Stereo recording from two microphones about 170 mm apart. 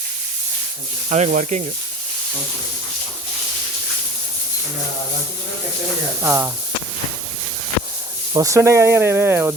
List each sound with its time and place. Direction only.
1.1 s speech: 45° right (ahead or behind)
6.2 s speech: 15° right (ahead or behind)
8.3 s speech: 20° right (ahead or behind)